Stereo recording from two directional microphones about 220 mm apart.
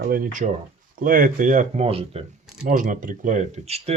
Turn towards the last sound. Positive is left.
turn(degrees=-30)  # may be behind; listen again after turning